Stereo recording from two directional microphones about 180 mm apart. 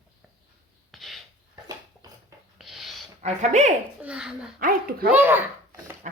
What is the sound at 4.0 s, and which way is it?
Speech, 5° right (ahead or behind).